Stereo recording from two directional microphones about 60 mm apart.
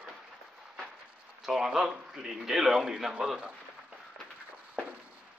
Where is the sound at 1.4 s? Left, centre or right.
Centre.